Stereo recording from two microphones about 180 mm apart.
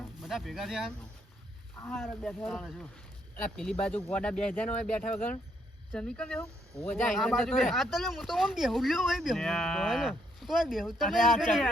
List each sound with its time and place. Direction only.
0.0 s speech: centre (ahead or behind)
2.0 s speech: 5° left (ahead or behind)